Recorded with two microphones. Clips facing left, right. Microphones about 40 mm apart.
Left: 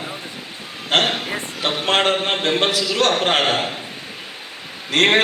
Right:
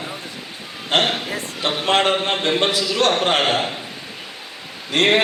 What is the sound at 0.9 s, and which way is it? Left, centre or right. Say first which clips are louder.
A man's voice: left 1 dB; centre.